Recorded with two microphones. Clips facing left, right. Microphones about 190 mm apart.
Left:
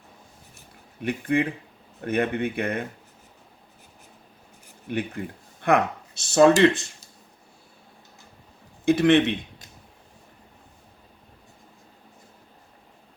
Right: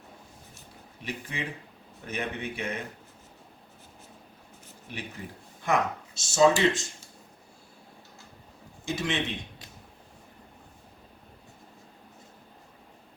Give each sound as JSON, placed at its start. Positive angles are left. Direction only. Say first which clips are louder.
{"t": 1.0, "sound": "speech", "louder": "left 12 dB", "side_deg": 55}
{"t": 4.9, "sound": "speech", "louder": "left 11 dB", "side_deg": 55}
{"t": 8.8, "sound": "speech", "louder": "left 13 dB", "side_deg": 60}